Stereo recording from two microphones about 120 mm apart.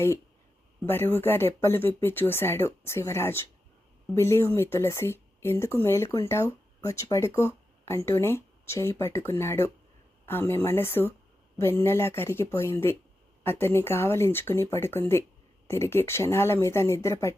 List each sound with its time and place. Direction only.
0.9 s speech: 20° left (ahead or behind)